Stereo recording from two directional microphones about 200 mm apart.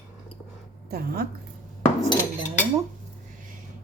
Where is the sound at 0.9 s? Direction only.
50° right (ahead or behind).